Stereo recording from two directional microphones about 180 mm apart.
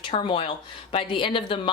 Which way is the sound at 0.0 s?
30° left (ahead or behind).